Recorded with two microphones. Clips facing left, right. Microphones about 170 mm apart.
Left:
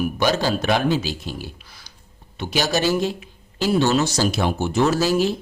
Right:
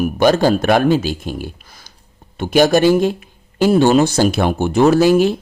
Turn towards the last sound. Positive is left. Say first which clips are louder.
# right 8 dB
turn(degrees=-55)  # may be behind; listen again after turning